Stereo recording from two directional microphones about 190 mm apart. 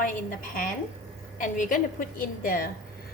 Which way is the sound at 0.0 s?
45° left (ahead or behind).